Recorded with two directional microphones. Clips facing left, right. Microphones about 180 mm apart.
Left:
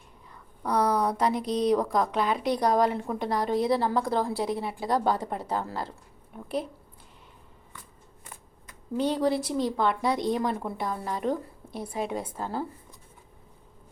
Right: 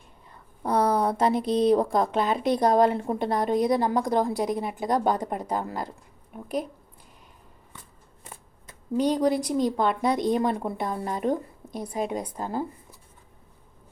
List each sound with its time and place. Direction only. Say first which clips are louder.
0.6 s speech: right 2 dB; 25° right (ahead or behind)
9.0 s speech: right 3 dB; 15° right (ahead or behind)